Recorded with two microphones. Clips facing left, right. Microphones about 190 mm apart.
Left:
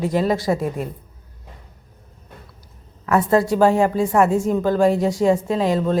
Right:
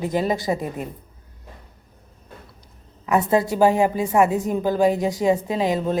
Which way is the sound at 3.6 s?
5° right (ahead or behind).